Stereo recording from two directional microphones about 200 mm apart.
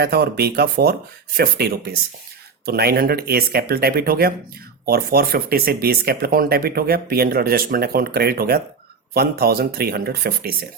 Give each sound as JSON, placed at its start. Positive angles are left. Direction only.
{"t": 0.0, "sound": "speech", "side_deg": -50}